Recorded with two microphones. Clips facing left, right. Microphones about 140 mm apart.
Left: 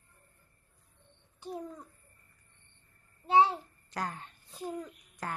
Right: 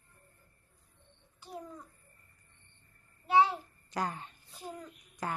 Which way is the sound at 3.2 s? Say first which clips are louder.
Left 1 dB; 45° left (ahead or behind).